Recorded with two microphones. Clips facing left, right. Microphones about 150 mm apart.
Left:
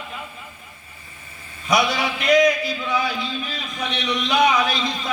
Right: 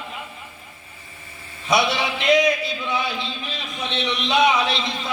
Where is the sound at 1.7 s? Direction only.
25° right (ahead or behind).